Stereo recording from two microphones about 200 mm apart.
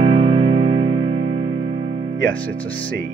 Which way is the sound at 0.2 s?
25° right (ahead or behind).